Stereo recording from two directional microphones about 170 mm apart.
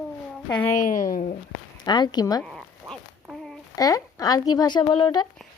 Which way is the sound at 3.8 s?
20° left (ahead or behind).